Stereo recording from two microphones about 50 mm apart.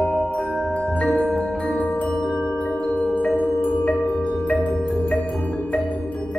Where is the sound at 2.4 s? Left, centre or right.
Left.